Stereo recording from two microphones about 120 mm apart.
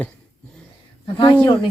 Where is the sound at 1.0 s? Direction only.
35° left (ahead or behind).